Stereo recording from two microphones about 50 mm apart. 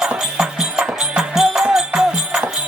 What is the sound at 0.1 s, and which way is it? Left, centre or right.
Music, centre.